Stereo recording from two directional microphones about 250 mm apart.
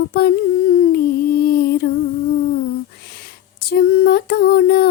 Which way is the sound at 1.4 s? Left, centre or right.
Left.